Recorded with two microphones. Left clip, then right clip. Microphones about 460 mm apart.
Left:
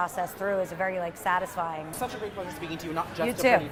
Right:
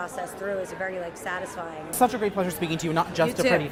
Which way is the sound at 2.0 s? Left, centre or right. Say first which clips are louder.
Right 13 dB; right.